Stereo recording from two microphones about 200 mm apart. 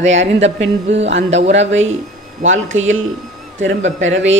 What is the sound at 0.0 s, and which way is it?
Speech, 65° right (ahead or behind).